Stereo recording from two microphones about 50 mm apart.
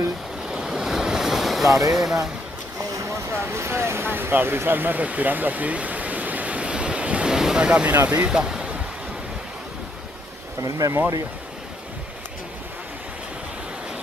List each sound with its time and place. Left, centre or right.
0.5 s waves: centre
3.3 s speech: right
7.2 s ocean: centre
7.6 s speech: right
7.9 s speech: right
8.3 s speech: centre